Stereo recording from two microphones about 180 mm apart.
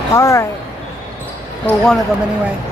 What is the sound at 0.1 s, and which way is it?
Speech, 15° left (ahead or behind).